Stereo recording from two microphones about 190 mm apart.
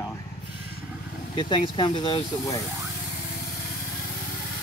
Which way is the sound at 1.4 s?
25° left (ahead or behind).